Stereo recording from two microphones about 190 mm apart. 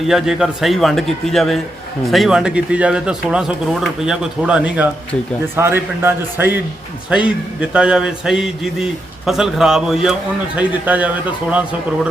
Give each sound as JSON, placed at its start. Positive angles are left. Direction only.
{"t": 0.1, "sound": "a man's voice", "side_deg": 0}